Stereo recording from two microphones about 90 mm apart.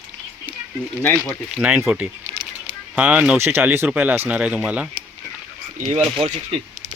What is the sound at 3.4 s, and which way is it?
Speech, 25° right (ahead or behind).